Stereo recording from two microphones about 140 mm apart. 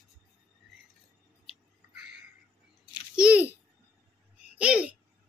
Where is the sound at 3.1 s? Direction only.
5° right (ahead or behind).